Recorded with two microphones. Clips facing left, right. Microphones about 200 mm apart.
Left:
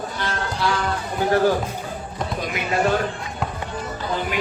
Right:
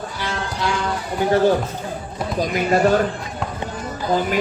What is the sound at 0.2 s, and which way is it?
Music, 15° right (ahead or behind).